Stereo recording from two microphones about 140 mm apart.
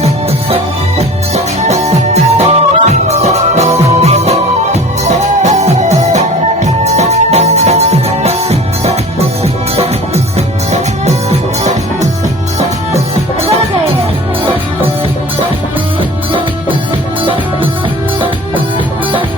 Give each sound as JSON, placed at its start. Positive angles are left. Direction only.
{"t": 0.5, "sound": "music", "side_deg": -50}